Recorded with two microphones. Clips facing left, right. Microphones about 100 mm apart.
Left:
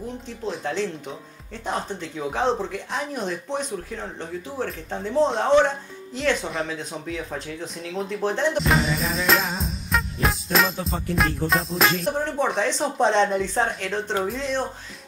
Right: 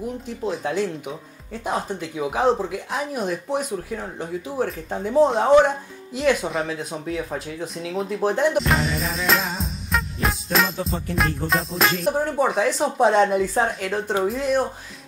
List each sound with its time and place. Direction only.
0.4 s speech: 5° right (ahead or behind)